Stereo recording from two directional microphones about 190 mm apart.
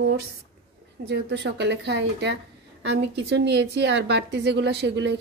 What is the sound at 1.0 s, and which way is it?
A woman's voice, 65° right (ahead or behind).